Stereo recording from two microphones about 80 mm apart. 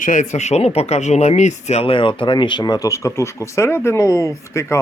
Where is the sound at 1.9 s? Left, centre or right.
Left.